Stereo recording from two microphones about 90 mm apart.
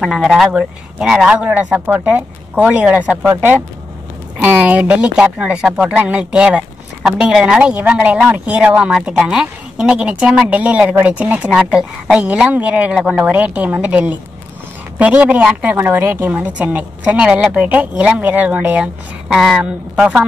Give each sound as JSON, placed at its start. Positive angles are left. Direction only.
{"t": 0.0, "sound": "speech", "side_deg": -5}
{"t": 19.2, "sound": "speech", "side_deg": 0}
{"t": 19.6, "sound": "speech", "side_deg": -10}